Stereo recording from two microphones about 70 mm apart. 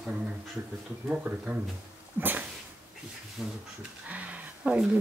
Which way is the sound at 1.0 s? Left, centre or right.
Centre.